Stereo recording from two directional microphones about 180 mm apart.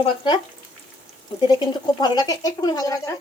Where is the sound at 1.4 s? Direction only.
25° left (ahead or behind).